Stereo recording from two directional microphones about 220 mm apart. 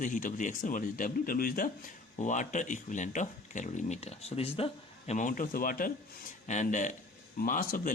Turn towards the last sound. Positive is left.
turn(degrees=40)  # may be behind; listen again after turning